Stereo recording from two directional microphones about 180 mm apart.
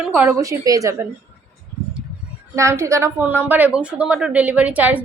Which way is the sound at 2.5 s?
15° right (ahead or behind).